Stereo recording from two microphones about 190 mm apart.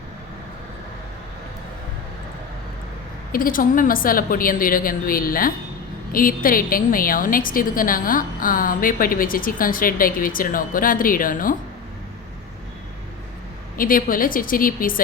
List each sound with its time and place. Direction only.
3.3 s a woman's voice: 45° left (ahead or behind)
13.7 s a woman's voice: 50° left (ahead or behind)